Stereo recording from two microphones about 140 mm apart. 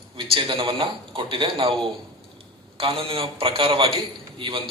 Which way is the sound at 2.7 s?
40° right (ahead or behind).